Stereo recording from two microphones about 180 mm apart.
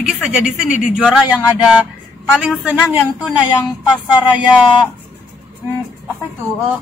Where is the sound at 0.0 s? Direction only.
5° right (ahead or behind).